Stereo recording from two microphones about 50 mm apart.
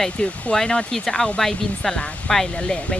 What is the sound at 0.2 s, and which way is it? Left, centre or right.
Speech, left.